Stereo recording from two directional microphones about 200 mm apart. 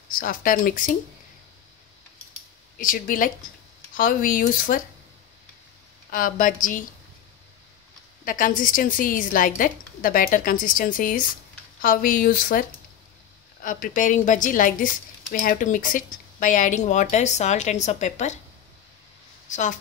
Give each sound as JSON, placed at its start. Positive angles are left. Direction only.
{"t": 0.1, "sound": "speech", "side_deg": 45}
{"t": 2.8, "sound": "speech", "side_deg": 40}
{"t": 6.1, "sound": "speech", "side_deg": 45}
{"t": 8.3, "sound": "speech", "side_deg": 45}
{"t": 19.5, "sound": "speech", "side_deg": 35}